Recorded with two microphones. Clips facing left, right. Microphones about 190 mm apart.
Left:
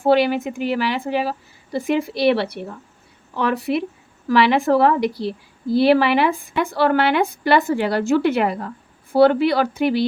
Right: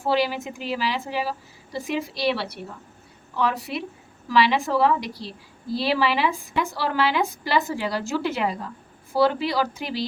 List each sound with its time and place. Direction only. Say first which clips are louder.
0.0 s a woman's voice: left 7 dB; 60° left (ahead or behind)